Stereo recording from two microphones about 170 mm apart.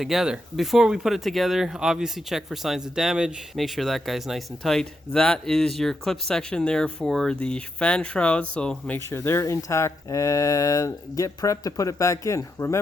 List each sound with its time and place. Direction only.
0.0 s speech: centre (ahead or behind)
9.0 s speech: 15° left (ahead or behind)